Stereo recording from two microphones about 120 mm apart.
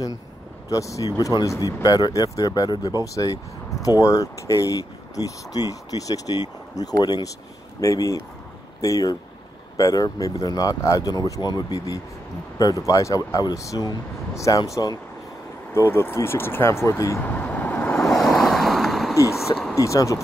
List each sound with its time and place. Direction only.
0.7 s speech: 25° left (ahead or behind)
15.7 s speech: 20° left (ahead or behind)
17.2 s vehicle: 15° left (ahead or behind)
18.1 s waves: centre (ahead or behind)
19.1 s speech: 25° left (ahead or behind)